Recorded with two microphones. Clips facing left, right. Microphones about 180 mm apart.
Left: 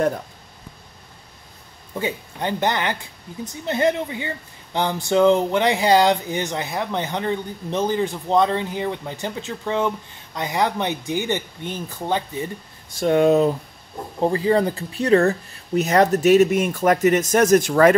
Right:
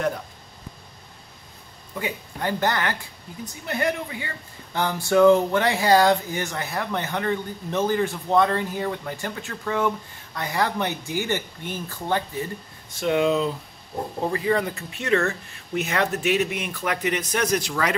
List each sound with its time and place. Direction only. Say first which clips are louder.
2.0 s speech: left 4 dB; 25° left (ahead or behind)
13.0 s speech: left 5 dB; 45° left (ahead or behind)
14.2 s speech: left 6 dB; 30° left (ahead or behind); by 17.9 s 50° left (ahead or behind)